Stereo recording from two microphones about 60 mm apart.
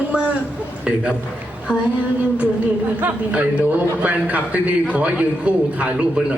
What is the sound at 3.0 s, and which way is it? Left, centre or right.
A man's voice, right.